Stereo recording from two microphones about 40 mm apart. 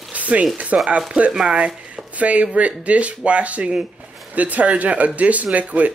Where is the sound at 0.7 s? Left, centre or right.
Right.